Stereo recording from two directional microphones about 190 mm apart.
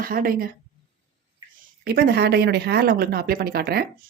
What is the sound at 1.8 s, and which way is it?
Speech, 55° right (ahead or behind).